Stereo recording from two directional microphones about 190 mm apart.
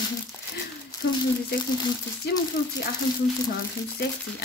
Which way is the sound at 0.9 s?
20° left (ahead or behind).